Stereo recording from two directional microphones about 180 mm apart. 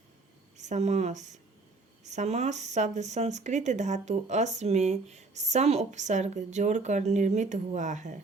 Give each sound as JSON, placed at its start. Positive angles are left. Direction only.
{"t": 0.5, "sound": "speech", "side_deg": -40}